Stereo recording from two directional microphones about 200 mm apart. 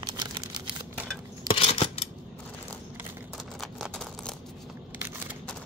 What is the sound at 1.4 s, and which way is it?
Scissors, 30° left (ahead or behind).